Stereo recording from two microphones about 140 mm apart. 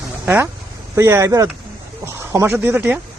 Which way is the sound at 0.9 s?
20° right (ahead or behind).